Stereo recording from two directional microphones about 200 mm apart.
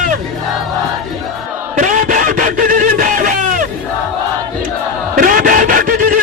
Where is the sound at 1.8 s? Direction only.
40° right (ahead or behind).